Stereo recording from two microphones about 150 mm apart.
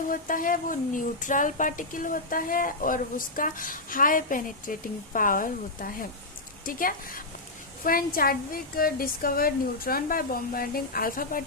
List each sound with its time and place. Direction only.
0.1 s speech: 65° left (ahead or behind)